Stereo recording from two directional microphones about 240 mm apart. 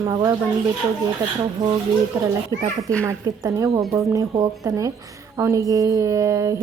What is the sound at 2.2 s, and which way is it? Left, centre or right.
A woman's voice, centre.